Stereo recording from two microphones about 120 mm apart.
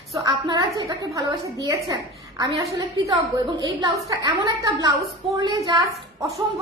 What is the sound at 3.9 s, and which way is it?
A woman's voice, 30° right (ahead or behind).